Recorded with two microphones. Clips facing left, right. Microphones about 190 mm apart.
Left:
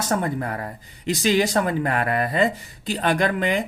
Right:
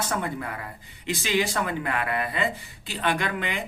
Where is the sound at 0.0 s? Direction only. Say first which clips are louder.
Left 5 dB; 40° left (ahead or behind).